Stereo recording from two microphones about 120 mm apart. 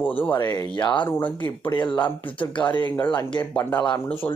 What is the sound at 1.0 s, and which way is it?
Speech, 15° left (ahead or behind).